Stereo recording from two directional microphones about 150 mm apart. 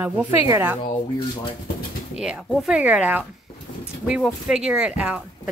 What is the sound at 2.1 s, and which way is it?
Speech, 5° right (ahead or behind).